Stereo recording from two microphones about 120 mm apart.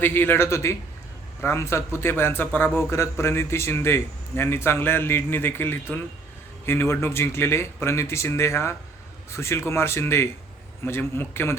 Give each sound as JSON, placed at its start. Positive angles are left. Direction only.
{"t": 0.0, "sound": "a man's voice", "side_deg": 15}